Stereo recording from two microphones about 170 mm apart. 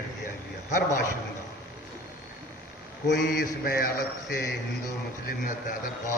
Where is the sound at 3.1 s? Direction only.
70° left (ahead or behind).